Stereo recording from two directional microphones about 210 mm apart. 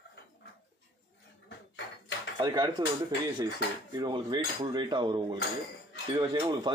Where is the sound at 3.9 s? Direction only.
20° right (ahead or behind).